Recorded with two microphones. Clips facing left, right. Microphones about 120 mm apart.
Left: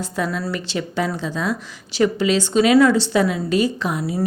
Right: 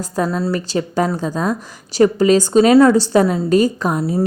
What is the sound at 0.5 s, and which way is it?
A woman's voice, 40° right (ahead or behind).